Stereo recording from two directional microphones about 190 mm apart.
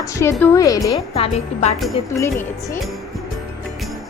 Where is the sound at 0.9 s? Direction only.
30° left (ahead or behind).